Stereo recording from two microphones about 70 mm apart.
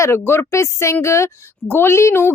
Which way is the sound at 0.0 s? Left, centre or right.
Left.